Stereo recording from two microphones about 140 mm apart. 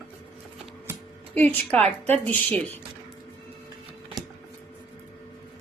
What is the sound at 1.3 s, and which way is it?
A woman's voice, 10° left (ahead or behind).